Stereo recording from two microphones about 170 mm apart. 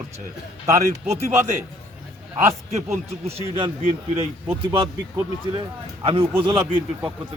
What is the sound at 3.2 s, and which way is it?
Speech, 30° right (ahead or behind).